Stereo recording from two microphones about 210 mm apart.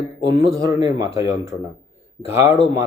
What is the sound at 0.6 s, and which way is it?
A man's voice, 15° right (ahead or behind).